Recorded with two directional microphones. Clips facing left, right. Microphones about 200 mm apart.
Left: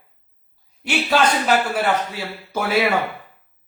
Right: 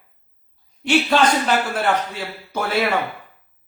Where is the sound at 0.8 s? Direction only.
5° left (ahead or behind).